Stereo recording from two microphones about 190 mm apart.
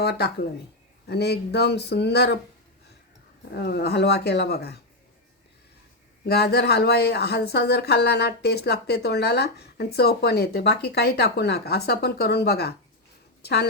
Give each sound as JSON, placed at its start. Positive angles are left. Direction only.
{"t": 0.0, "sound": "speech", "side_deg": 60}
{"t": 3.5, "sound": "speech", "side_deg": 60}
{"t": 6.2, "sound": "a woman's voice", "side_deg": 55}